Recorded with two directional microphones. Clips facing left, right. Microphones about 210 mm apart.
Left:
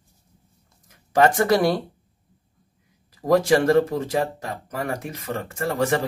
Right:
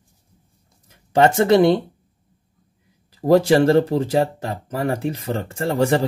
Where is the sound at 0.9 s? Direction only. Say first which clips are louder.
Right 2 dB; 25° right (ahead or behind).